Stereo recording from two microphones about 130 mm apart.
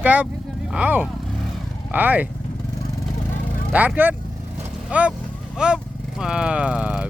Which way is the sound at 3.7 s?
10° right (ahead or behind).